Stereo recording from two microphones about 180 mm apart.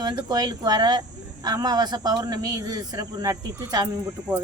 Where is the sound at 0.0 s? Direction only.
25° right (ahead or behind).